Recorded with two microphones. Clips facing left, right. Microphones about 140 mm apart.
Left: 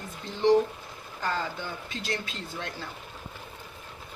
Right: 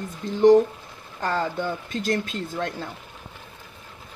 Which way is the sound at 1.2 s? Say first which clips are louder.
Right 6 dB; 55° right (ahead or behind).